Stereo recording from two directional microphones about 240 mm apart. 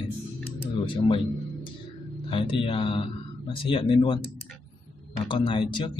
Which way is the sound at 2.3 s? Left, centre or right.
Left.